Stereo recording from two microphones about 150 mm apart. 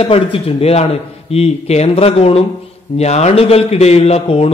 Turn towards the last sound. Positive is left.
turn(degrees=45)  # may be behind; listen again after turning